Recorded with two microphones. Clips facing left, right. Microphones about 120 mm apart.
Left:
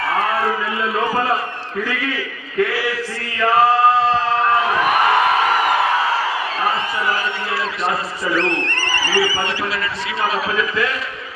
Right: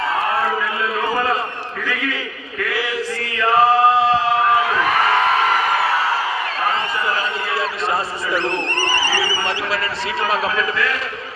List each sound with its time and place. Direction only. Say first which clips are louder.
3.7 s music: even; 15° right (ahead or behind)
4.8 s crowd: left 1 dB; 15° left (ahead or behind)
8.4 s a man's voice: even; 15° right (ahead or behind)